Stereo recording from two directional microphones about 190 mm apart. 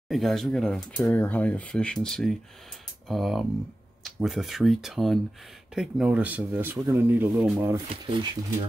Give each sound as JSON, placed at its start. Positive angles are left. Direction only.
{"t": 0.1, "sound": "speech", "side_deg": 0}
{"t": 7.9, "sound": "speech", "side_deg": -25}